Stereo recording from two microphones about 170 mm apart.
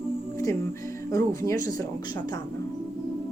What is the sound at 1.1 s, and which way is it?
Speech, 20° left (ahead or behind).